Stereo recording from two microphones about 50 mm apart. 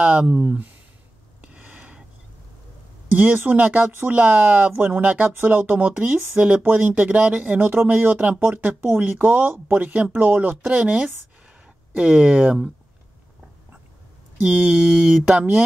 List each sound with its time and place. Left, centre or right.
0.0 s speech: right
1.4 s a sound: right
3.1 s speech: right
6.6 s speech: right
7.6 s speech: right
10.6 s speech: right
12.0 s mantra: centre
14.4 s mantra: centre